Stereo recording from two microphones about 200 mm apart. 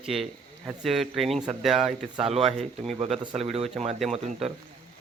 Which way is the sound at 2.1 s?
30° right (ahead or behind).